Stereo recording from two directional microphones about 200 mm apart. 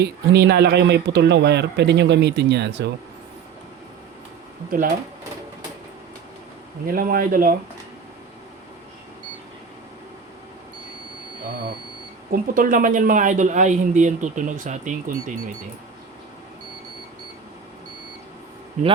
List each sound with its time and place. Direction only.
0.0 s speech: 55° right (ahead or behind)
6.8 s speech: 45° right (ahead or behind)
12.3 s speech: 45° right (ahead or behind)
18.8 s speech: 35° right (ahead or behind)